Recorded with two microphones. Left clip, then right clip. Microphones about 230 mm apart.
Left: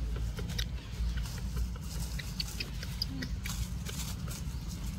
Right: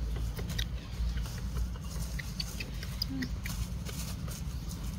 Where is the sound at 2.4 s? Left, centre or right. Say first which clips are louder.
Left 3 dB; centre.